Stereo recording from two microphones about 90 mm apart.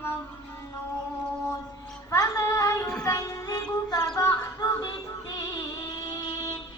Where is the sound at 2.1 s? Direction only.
40° left (ahead or behind).